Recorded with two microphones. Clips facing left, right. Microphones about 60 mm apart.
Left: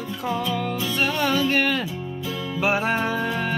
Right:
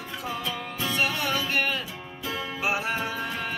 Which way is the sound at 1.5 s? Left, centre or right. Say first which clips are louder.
Left 5 dB; left.